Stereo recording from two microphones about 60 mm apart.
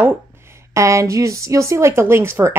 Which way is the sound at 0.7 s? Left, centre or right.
Right.